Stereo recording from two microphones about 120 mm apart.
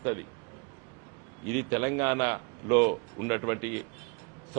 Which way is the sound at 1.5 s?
20° right (ahead or behind).